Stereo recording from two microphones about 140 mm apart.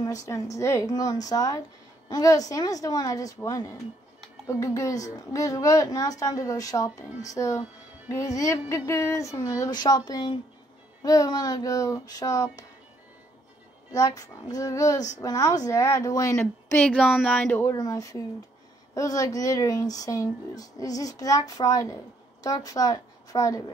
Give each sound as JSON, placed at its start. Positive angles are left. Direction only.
{"t": 0.0, "sound": "speech", "side_deg": 25}
{"t": 13.9, "sound": "speech", "side_deg": 25}
{"t": 16.8, "sound": "speech", "side_deg": 5}
{"t": 17.7, "sound": "speech", "side_deg": 25}